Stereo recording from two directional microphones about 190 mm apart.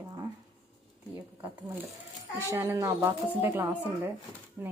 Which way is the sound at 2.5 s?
15° right (ahead or behind).